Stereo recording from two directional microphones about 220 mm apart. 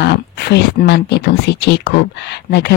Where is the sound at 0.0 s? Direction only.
50° left (ahead or behind).